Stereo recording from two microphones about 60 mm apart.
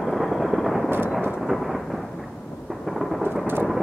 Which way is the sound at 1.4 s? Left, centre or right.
Centre.